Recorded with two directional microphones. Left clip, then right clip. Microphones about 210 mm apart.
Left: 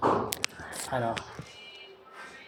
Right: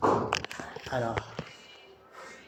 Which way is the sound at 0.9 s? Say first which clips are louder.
Left 1 dB; 5° right (ahead or behind).